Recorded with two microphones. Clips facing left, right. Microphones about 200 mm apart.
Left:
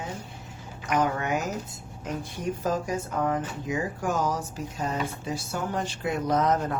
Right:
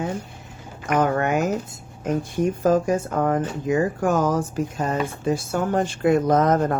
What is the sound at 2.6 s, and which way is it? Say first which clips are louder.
Speech: right 9 dB; 50° right (ahead or behind).